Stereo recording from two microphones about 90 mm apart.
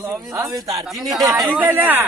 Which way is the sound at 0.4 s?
45° right (ahead or behind).